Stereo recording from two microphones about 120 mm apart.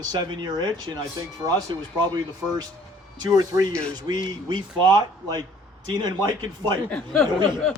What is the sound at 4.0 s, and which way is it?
Speech, 35° right (ahead or behind).